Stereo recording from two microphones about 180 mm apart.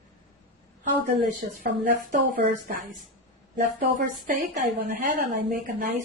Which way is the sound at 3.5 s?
50° right (ahead or behind).